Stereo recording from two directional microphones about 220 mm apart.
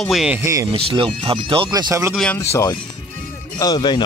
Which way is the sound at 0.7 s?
25° right (ahead or behind).